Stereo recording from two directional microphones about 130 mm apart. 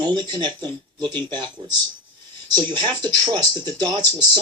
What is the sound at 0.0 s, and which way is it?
Speech, 35° right (ahead or behind).